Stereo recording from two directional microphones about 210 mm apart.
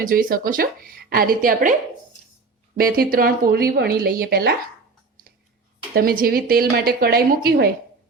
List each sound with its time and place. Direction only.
0.0 s a woman's voice: 40° right (ahead or behind)
2.7 s a woman's voice: 45° right (ahead or behind)
5.9 s a woman's voice: 45° right (ahead or behind)